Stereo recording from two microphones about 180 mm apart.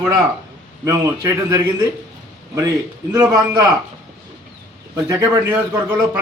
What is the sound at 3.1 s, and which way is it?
Speech, 15° right (ahead or behind).